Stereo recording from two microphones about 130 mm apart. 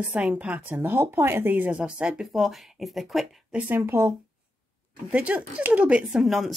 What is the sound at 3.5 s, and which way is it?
Speech, 15° right (ahead or behind).